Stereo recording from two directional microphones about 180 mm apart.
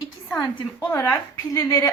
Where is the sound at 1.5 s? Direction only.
20° left (ahead or behind).